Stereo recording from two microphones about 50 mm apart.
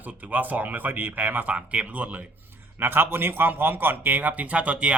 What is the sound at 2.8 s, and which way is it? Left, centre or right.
A man's voice, right.